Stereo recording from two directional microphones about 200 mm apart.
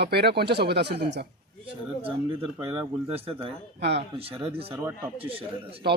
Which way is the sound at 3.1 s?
30° right (ahead or behind).